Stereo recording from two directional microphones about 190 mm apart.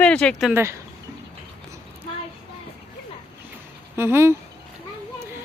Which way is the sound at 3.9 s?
10° right (ahead or behind).